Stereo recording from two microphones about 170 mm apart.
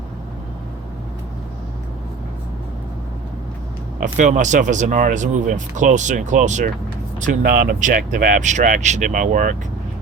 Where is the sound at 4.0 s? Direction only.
50° right (ahead or behind).